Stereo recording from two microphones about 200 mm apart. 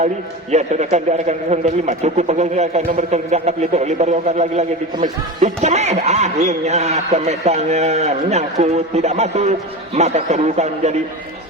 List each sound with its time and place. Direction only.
0.5 s a man's voice: 35° right (ahead or behind)